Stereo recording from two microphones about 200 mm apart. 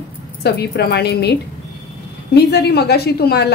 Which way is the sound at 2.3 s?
55° left (ahead or behind).